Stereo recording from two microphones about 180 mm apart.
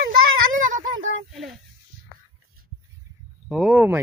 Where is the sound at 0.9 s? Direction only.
90° right.